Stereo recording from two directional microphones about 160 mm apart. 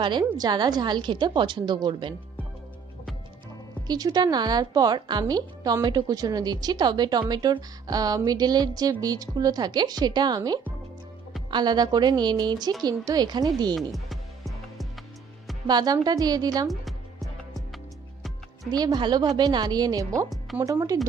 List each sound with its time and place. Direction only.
0.0 s a woman's voice: 25° right (ahead or behind)
3.8 s a woman's voice: 25° right (ahead or behind)
13.7 s music: centre (ahead or behind)
15.6 s a woman's voice: 25° right (ahead or behind)
18.7 s a woman's voice: 25° right (ahead or behind)